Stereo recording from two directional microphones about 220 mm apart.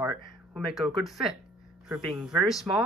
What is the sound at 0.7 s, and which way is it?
Speech, centre (ahead or behind).